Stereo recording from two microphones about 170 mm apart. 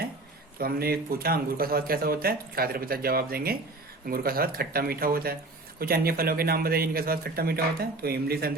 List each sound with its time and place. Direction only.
0.6 s speech: 65° right (ahead or behind)